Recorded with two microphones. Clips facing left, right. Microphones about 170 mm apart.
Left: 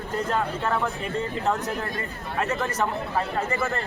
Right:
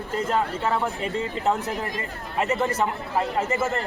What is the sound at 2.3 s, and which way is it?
Speech, 20° right (ahead or behind).